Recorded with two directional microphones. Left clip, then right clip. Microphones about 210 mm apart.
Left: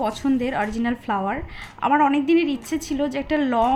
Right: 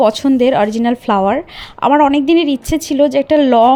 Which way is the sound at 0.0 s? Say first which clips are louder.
Right 12 dB; 30° right (ahead or behind).